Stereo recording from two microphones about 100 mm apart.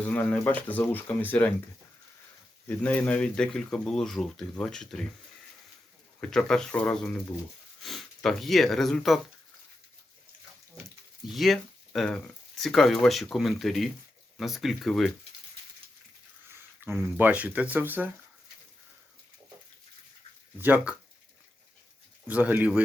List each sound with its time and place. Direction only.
0.1 s speech: 15° left (ahead or behind)
2.6 s speech: 15° left (ahead or behind)
6.3 s speech: 5° left (ahead or behind)
11.3 s speech: centre (ahead or behind)
16.8 s speech: 20° right (ahead or behind)
20.6 s speech: 20° right (ahead or behind)
22.3 s speech: 15° right (ahead or behind)